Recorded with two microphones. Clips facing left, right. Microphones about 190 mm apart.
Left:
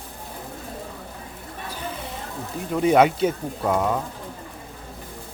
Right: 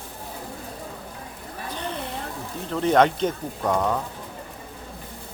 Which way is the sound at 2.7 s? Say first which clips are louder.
Left 2 dB; 10° left (ahead or behind).